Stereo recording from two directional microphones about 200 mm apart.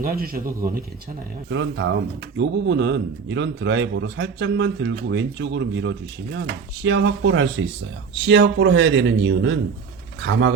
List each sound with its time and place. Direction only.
0.0 s a man's voice: 45° right (ahead or behind)
1.5 s a man's voice: 65° right (ahead or behind)